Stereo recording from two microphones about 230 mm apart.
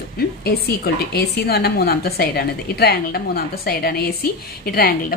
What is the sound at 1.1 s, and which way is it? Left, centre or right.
A woman's voice, left.